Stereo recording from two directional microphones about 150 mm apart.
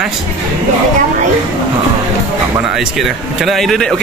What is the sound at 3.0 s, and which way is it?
Speech, centre (ahead or behind).